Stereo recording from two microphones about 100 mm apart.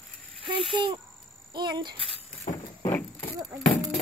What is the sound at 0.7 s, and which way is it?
A child's voice, 50° right (ahead or behind).